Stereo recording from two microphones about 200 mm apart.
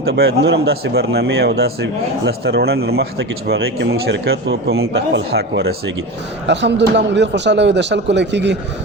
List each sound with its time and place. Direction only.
0.2 s a man's voice: 60° right (ahead or behind)